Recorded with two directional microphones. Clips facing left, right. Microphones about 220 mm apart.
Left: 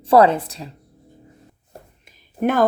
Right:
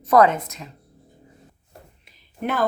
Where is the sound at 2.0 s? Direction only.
50° left (ahead or behind).